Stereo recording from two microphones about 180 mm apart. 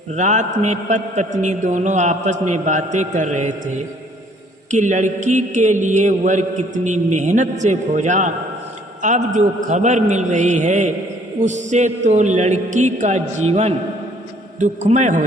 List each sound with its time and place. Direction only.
0.2 s a man's voice: 40° right (ahead or behind)
4.7 s a man's voice: 40° right (ahead or behind)